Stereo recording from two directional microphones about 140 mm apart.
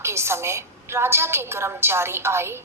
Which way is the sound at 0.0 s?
20° right (ahead or behind).